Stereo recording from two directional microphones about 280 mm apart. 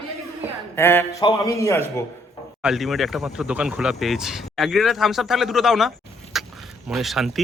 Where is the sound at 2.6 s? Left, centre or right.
Centre.